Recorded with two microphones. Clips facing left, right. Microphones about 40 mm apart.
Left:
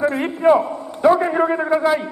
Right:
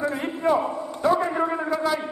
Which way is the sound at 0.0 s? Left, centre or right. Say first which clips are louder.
Left 7 dB; left.